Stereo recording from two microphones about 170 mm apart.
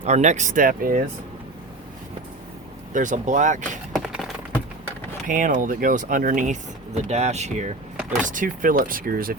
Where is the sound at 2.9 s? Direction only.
45° right (ahead or behind).